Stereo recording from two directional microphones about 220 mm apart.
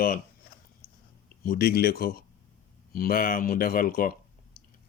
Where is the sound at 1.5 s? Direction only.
45° left (ahead or behind).